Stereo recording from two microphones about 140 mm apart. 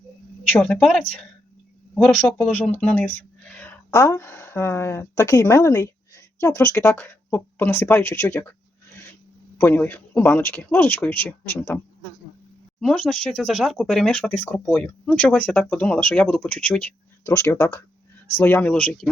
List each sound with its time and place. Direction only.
0.6 s a woman's voice: 5° left (ahead or behind)
2.0 s speech: 5° left (ahead or behind)
9.6 s speech: 15° left (ahead or behind)
12.8 s speech: 10° left (ahead or behind)